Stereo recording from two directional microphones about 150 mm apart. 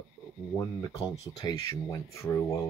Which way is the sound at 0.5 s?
20° left (ahead or behind).